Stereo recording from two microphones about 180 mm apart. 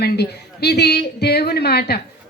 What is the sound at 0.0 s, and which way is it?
A woman's voice, 65° left (ahead or behind).